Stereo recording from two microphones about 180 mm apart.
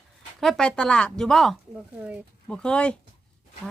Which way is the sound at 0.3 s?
Centre (ahead or behind).